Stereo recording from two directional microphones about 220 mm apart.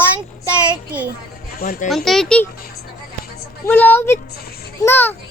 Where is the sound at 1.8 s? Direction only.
Centre (ahead or behind).